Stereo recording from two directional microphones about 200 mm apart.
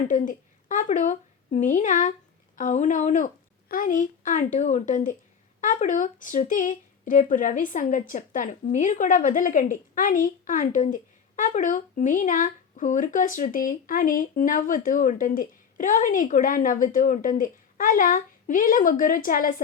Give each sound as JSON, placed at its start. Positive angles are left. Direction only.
{"t": 0.1, "sound": "a woman's voice", "side_deg": 40}